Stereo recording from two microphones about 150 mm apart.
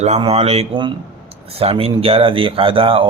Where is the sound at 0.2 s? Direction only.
45° right (ahead or behind).